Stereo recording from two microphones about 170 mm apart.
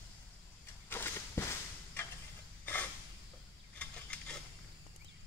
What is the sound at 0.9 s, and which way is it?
Walk, 15° left (ahead or behind).